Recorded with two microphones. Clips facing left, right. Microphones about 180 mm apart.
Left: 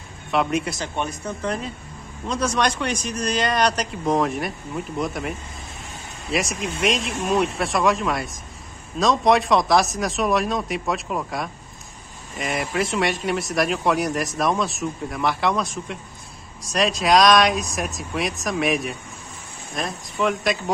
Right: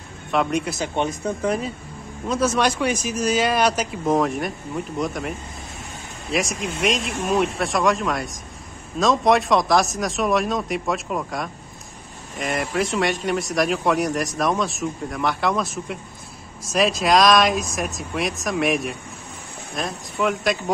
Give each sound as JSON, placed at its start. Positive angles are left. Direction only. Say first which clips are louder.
{"t": 0.3, "sound": "speech", "louder": "even", "side_deg": 0}
{"t": 0.9, "sound": "speech", "louder": "right 6 dB", "side_deg": -20}
{"t": 1.4, "sound": "speech", "louder": "right 2 dB", "side_deg": -10}
{"t": 6.3, "sound": "speech", "louder": "right 1 dB", "side_deg": 0}